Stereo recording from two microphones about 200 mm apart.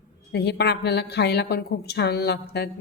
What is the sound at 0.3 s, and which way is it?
A woman's voice, 55° left (ahead or behind).